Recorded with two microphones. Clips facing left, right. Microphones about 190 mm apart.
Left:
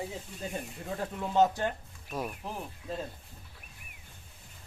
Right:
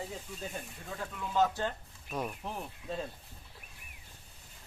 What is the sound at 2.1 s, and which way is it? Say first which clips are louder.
Speech: left 1 dB; centre (ahead or behind).